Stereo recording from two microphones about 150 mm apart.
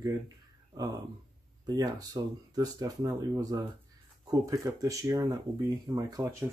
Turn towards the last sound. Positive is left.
turn(degrees=-25)  # may be behind; listen again after turning